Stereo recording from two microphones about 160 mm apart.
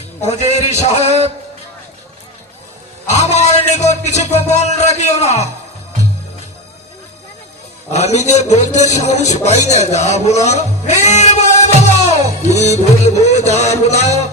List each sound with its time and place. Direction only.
0.2 s a man's voice: 45° left (ahead or behind)
3.1 s music: 45° left (ahead or behind)
7.9 s a man's voice: 45° left (ahead or behind)
11.0 s music: 45° left (ahead or behind)
13.8 s a man's voice: 45° left (ahead or behind)